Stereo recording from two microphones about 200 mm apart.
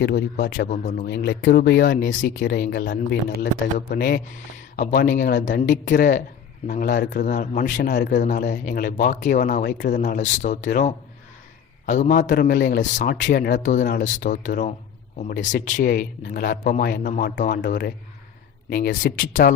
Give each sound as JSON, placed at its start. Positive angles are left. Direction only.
{"t": 0.0, "sound": "speech", "side_deg": 55}
{"t": 0.7, "sound": "a man's voice", "side_deg": 40}
{"t": 1.0, "sound": "speech", "side_deg": 55}
{"t": 4.8, "sound": "a man's voice", "side_deg": 40}